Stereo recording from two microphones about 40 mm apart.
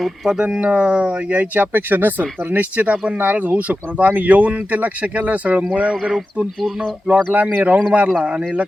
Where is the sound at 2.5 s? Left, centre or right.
Right.